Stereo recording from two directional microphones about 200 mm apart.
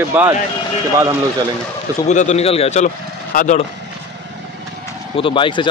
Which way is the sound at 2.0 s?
35° left (ahead or behind).